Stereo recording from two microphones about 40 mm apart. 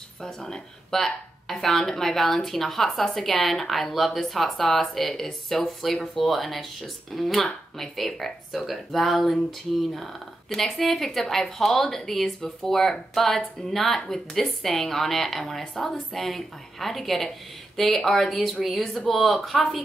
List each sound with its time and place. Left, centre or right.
0.2 s a woman's voice: centre